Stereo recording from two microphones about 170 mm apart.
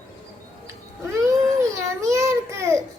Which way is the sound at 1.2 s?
20° right (ahead or behind).